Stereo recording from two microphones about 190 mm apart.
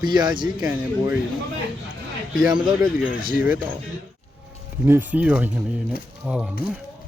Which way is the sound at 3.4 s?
10° right (ahead or behind).